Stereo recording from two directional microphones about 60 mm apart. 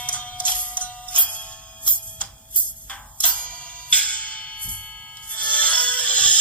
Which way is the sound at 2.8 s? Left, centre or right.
Left.